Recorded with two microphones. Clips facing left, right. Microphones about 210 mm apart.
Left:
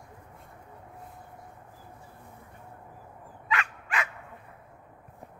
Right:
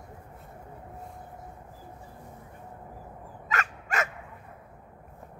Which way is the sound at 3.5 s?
45° right (ahead or behind).